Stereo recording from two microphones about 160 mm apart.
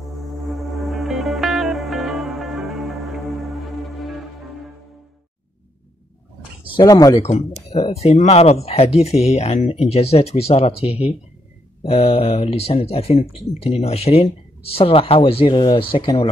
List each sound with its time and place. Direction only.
0.3 s music: centre (ahead or behind)
6.7 s speech: 25° left (ahead or behind)
7.2 s speech: 40° left (ahead or behind)